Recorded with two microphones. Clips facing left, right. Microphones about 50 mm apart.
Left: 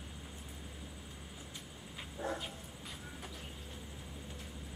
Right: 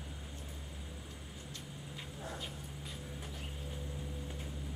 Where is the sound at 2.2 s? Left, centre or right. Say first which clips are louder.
Left 7 dB; left.